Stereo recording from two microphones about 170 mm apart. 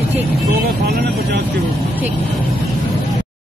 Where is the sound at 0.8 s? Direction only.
65° right (ahead or behind).